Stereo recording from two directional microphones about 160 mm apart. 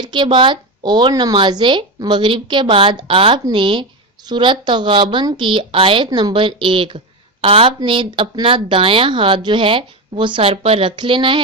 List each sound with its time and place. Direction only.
0.0 s speech: 30° right (ahead or behind)